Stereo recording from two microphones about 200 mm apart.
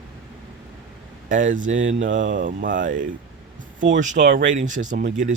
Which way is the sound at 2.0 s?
70° right (ahead or behind).